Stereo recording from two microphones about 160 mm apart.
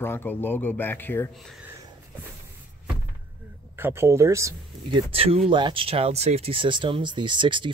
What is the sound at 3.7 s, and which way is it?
Speech, 15° right (ahead or behind).